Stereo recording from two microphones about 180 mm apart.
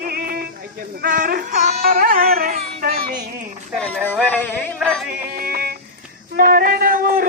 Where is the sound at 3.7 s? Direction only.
5° left (ahead or behind).